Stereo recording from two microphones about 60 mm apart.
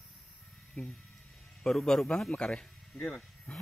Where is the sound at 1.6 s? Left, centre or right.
Centre.